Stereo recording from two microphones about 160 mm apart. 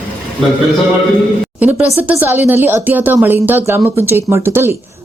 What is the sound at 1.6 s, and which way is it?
Speech, 10° right (ahead or behind).